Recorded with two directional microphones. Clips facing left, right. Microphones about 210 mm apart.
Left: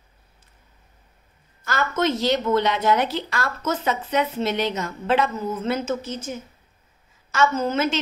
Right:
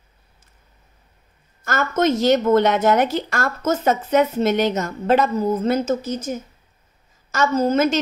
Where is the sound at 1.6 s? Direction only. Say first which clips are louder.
Right 4 dB; 45° right (ahead or behind).